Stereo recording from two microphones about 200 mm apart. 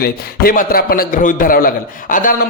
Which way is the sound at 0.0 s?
45° left (ahead or behind).